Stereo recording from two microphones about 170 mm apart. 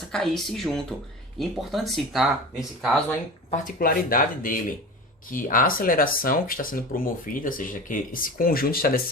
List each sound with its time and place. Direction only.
0.1 s speech: centre (ahead or behind)
3.5 s speech: 55° left (ahead or behind)